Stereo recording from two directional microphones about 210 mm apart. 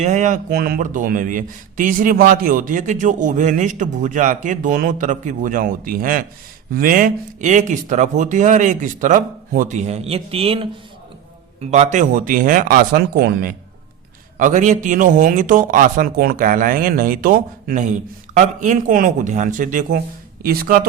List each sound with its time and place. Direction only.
0.0 s speech: 35° right (ahead or behind)